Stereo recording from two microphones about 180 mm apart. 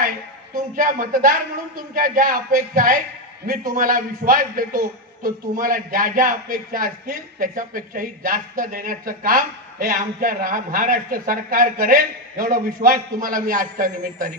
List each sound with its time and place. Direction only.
0.7 s speech: 50° right (ahead or behind)